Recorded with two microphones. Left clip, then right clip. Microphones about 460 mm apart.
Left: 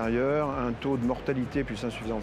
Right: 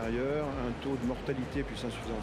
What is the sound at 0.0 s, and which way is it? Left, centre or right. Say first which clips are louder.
Speech: left 6 dB; left.